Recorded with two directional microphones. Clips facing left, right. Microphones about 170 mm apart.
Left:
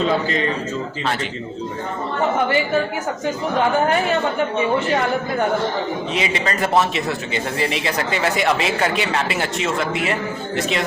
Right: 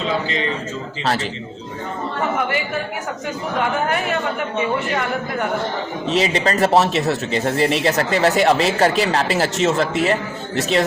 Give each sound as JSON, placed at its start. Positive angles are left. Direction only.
{"t": 6.1, "sound": "speech", "side_deg": -35}